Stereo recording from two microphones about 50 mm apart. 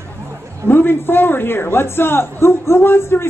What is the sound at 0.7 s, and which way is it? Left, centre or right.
A man's voice, left.